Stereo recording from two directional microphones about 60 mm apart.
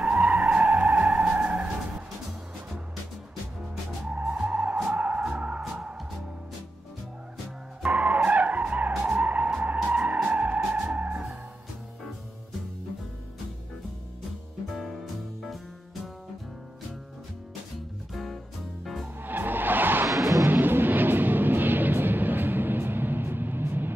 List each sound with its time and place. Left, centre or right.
0.0 s vehicle: centre
0.7 s music: centre
4.5 s skidding: right
4.8 s music: right
5.6 s music: centre
7.8 s music: right
8.2 s skidding: right
9.8 s music: right
14.7 s music: centre
18.1 s music: centre
19.2 s music: right
20.1 s music: right
20.4 s vehicle: right